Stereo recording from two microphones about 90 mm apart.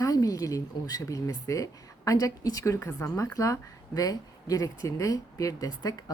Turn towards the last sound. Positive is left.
turn(degrees=40)  # may be behind; listen again after turning